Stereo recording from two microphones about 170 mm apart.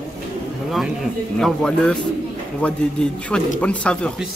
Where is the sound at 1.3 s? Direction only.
5° left (ahead or behind).